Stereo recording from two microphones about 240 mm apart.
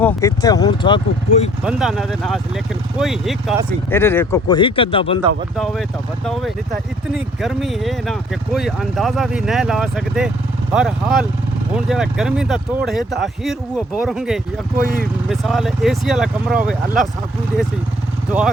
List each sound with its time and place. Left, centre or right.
0.0 s speech: centre
1.6 s speech: centre
3.8 s speech: centre
7.4 s speech: centre
18.3 s speech: centre